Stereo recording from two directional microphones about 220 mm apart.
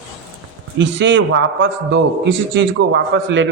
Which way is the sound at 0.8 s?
55° right (ahead or behind).